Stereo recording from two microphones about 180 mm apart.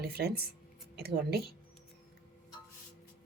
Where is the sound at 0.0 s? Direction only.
60° right (ahead or behind).